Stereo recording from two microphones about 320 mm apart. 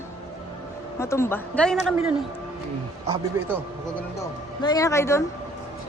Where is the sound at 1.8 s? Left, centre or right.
Centre.